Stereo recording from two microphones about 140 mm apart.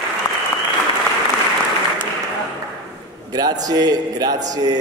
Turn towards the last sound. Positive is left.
turn(degrees=-25)  # may be behind; listen again after turning